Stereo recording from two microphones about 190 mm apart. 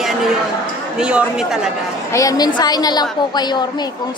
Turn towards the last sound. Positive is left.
turn(degrees=20)  # may be behind; listen again after turning